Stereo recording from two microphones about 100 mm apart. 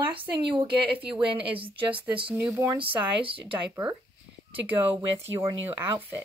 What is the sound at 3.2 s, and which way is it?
Speech, 65° right (ahead or behind).